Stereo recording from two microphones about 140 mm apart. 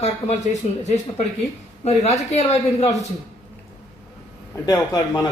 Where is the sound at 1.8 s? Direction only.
50° left (ahead or behind).